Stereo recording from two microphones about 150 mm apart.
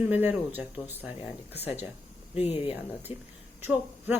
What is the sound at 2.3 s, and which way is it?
Speech, 40° left (ahead or behind).